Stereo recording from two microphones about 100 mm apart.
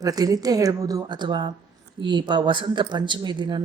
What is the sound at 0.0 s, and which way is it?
A woman's voice, 40° right (ahead or behind).